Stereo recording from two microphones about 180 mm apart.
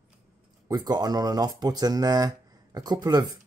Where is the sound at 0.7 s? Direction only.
20° right (ahead or behind).